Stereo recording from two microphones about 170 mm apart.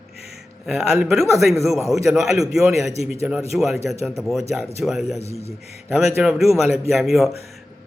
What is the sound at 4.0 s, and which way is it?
Speech, 15° right (ahead or behind).